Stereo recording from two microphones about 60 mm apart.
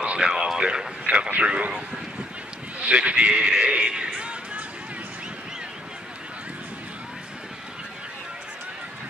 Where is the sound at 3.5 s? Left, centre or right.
Centre.